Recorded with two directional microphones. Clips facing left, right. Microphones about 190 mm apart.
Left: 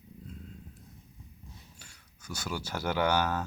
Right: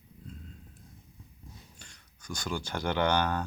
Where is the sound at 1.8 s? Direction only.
5° left (ahead or behind).